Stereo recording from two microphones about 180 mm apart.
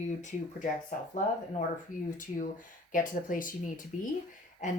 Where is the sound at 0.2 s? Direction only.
45° left (ahead or behind).